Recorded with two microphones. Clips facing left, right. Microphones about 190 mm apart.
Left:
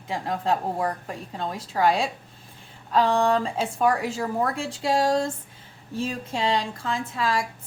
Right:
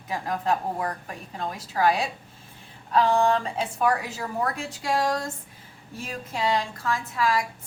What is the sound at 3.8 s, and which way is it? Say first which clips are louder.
A woman's voice: left 2 dB; 30° left (ahead or behind).